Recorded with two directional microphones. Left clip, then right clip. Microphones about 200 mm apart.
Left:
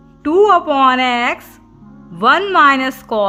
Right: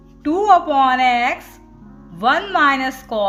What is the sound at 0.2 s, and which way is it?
A woman's voice, 40° left (ahead or behind).